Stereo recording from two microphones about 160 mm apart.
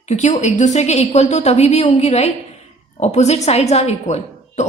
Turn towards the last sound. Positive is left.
turn(degrees=45)  # may be behind; listen again after turning